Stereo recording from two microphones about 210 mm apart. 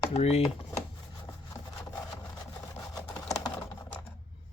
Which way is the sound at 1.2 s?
15° left (ahead or behind).